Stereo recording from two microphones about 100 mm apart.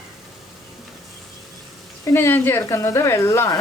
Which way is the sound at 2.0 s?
25° left (ahead or behind).